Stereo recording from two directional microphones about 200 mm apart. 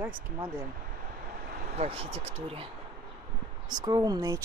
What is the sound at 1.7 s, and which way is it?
Speech, 30° right (ahead or behind).